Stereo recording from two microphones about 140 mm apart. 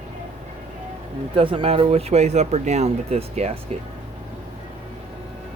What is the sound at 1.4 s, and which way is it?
Speech, 40° right (ahead or behind).